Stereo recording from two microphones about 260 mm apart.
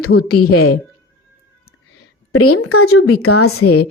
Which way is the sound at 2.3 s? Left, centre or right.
Left.